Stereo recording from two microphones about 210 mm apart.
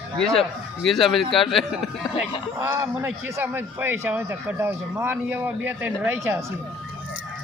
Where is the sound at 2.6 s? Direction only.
10° right (ahead or behind).